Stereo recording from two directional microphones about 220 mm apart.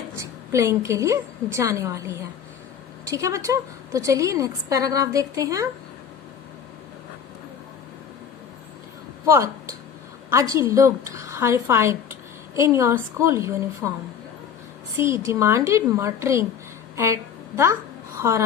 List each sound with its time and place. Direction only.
0.2 s a woman's voice: 15° right (ahead or behind)
9.2 s a woman's voice: 15° right (ahead or behind)
14.9 s a woman's voice: 10° right (ahead or behind)
18.2 s a woman's voice: 15° right (ahead or behind)